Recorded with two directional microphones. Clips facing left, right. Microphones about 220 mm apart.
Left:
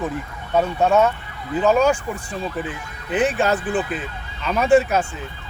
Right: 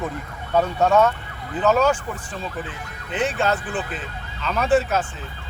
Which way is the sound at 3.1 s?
15° left (ahead or behind).